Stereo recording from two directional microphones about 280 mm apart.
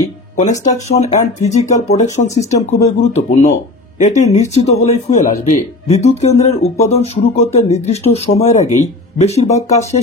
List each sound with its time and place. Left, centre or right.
0.0 s speech: left